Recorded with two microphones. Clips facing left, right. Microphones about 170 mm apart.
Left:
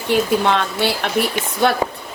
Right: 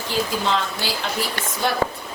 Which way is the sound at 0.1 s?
65° left (ahead or behind).